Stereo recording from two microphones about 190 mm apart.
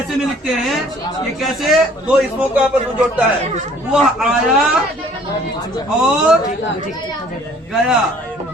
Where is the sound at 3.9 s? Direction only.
5° right (ahead or behind).